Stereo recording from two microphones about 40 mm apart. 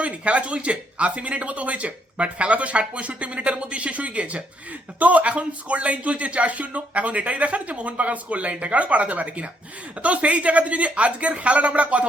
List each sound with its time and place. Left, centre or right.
0.0 s speech: right